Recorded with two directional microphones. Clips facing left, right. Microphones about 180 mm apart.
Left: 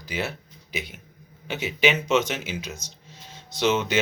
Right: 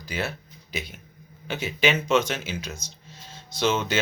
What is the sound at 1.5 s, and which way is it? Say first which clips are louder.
Speech: left 1 dB; 15° left (ahead or behind).